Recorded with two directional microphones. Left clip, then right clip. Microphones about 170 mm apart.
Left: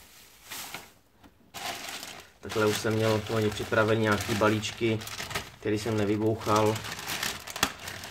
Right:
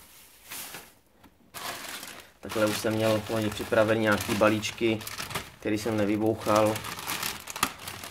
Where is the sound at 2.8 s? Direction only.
40° right (ahead or behind).